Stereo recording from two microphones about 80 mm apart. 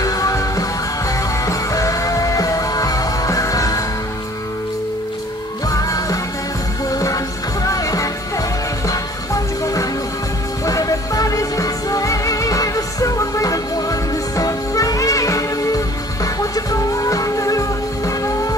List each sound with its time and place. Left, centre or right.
0.0 s music: left
5.7 s music: left